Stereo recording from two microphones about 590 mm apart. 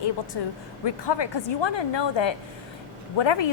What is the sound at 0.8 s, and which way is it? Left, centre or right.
A woman's voice, left.